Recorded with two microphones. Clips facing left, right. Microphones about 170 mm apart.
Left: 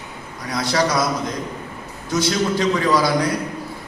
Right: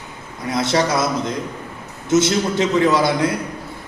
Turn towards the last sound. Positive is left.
turn(degrees=-25)  # may be behind; listen again after turning